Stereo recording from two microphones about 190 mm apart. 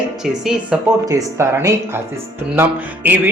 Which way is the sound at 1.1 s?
15° right (ahead or behind).